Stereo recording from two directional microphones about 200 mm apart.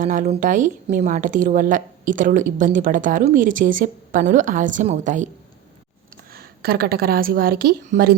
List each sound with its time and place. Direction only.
0.0 s a woman's voice: 40° right (ahead or behind)
6.3 s a woman's voice: 50° right (ahead or behind)